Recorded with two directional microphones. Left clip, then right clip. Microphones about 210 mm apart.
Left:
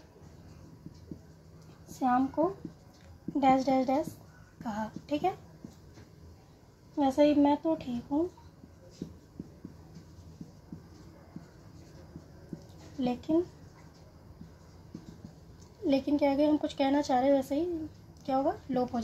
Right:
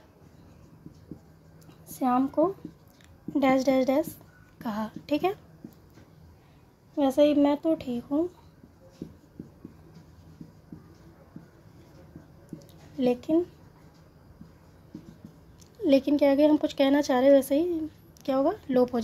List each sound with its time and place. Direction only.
2.0 s a woman's voice: 55° right (ahead or behind)
7.0 s a woman's voice: 55° right (ahead or behind)
13.0 s a woman's voice: 55° right (ahead or behind)
15.9 s a woman's voice: 55° right (ahead or behind)